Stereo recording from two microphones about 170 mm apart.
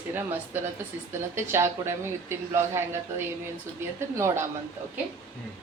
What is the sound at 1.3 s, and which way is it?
Speech, 15° right (ahead or behind).